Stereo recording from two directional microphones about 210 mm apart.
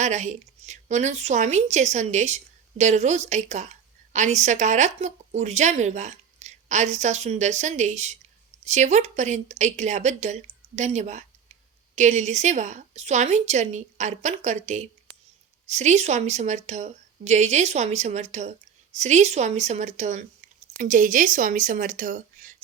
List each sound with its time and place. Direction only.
0.0 s a woman's voice: 35° right (ahead or behind)